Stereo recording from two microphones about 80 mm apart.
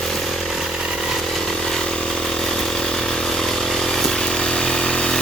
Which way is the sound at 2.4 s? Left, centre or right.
Centre.